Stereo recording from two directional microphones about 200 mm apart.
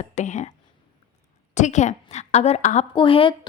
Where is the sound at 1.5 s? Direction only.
35° left (ahead or behind).